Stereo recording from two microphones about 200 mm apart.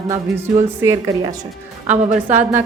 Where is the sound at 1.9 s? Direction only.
35° right (ahead or behind).